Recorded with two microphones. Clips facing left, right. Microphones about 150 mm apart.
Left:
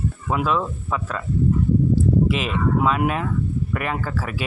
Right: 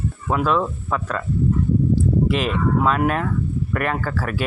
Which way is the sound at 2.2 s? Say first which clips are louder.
Right 1 dB; centre (ahead or behind).